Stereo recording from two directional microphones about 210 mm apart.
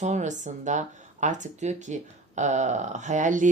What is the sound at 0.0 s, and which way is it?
Speech, 35° right (ahead or behind).